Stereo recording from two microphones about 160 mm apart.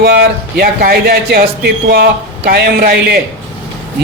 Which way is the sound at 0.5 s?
70° right (ahead or behind).